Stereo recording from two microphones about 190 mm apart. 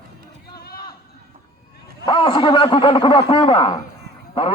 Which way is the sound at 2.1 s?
25° left (ahead or behind).